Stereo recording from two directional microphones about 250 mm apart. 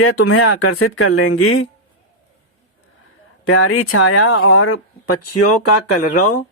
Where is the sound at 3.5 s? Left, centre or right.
Left.